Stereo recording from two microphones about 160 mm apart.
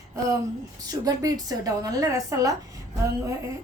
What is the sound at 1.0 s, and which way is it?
A woman's voice, 20° right (ahead or behind).